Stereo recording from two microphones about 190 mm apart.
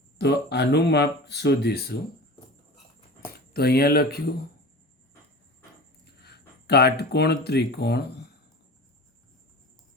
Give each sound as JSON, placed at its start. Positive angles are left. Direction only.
{"t": 0.2, "sound": "speech", "side_deg": 60}
{"t": 3.5, "sound": "speech", "side_deg": 55}
{"t": 6.2, "sound": "speech", "side_deg": 60}